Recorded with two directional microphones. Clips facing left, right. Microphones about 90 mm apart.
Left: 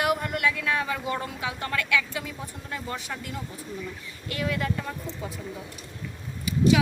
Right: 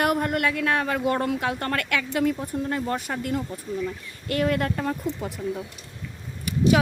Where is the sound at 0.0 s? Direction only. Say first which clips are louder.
Right 3 dB; 50° right (ahead or behind).